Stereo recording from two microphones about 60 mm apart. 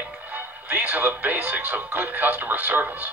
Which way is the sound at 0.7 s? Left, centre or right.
Right.